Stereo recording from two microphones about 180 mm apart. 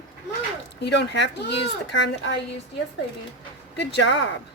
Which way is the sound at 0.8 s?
75° left (ahead or behind).